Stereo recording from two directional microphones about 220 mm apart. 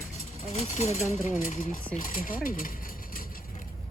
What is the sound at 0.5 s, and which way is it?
Speech, 30° left (ahead or behind).